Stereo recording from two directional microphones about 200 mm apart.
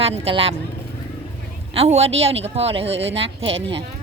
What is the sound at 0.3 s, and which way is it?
Speech, 30° right (ahead or behind).